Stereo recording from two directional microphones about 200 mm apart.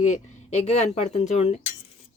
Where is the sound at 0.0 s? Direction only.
35° left (ahead or behind).